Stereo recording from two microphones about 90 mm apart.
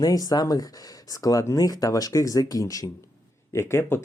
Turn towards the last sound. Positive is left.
turn(degrees=25)  # may be behind; listen again after turning